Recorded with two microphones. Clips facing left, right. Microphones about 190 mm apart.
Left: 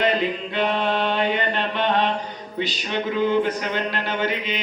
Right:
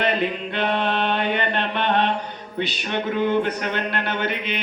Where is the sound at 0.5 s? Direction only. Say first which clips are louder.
Left 2 dB; 60° right (ahead or behind).